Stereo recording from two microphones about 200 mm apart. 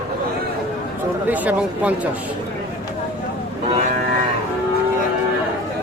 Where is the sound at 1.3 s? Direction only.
5° right (ahead or behind).